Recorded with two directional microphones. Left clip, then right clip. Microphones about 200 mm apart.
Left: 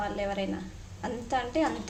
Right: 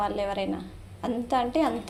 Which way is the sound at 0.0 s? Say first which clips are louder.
Right 4 dB; 25° right (ahead or behind).